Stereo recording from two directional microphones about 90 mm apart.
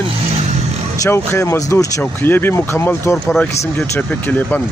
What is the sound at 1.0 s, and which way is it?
Speech, 30° left (ahead or behind).